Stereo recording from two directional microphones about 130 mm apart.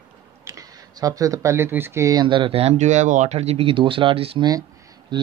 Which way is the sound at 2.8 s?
70° right (ahead or behind).